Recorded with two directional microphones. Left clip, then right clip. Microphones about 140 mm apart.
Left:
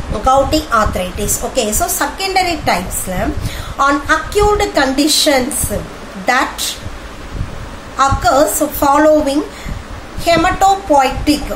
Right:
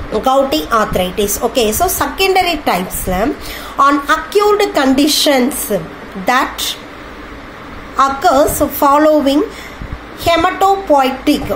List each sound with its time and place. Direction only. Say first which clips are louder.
0.1 s a woman's voice: even; 30° right (ahead or behind)
8.0 s a woman's voice: right 1 dB; 25° right (ahead or behind)